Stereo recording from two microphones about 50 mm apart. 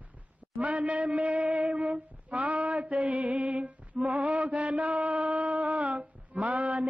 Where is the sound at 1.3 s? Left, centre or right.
Right.